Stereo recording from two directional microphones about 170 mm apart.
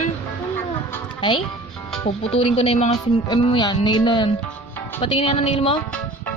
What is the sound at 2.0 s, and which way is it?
Speech, 35° left (ahead or behind).